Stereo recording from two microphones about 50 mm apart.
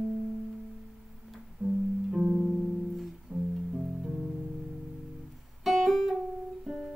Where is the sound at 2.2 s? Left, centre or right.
Right.